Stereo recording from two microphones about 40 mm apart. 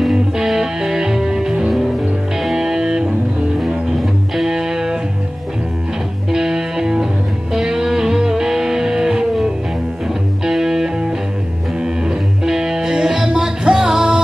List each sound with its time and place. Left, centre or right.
0.1 s music: centre
2.5 s music: centre
3.5 s music: centre
6.3 s music: centre
12.4 s music: centre